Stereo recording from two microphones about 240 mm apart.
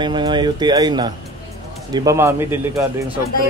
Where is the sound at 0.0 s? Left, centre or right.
Centre.